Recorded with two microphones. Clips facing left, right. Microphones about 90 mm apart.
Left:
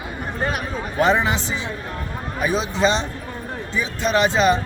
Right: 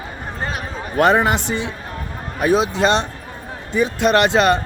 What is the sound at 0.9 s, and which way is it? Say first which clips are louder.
Speech: right 4 dB; 55° right (ahead or behind).